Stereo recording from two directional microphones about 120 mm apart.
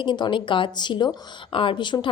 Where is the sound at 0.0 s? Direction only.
40° left (ahead or behind).